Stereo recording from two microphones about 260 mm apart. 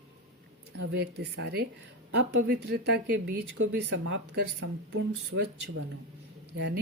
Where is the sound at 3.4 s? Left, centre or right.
Right.